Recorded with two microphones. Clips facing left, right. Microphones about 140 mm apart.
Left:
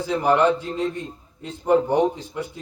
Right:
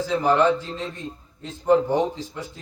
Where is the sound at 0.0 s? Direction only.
15° left (ahead or behind).